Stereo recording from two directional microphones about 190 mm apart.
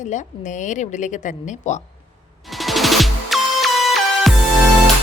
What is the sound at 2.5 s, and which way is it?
Music, centre (ahead or behind).